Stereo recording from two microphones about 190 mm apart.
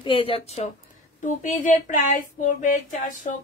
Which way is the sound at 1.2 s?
40° left (ahead or behind).